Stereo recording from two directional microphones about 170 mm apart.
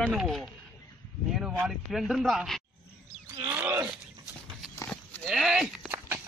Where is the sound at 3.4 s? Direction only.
10° right (ahead or behind).